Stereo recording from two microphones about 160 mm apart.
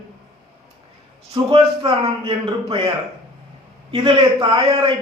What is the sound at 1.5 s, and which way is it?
A man's voice, 35° right (ahead or behind).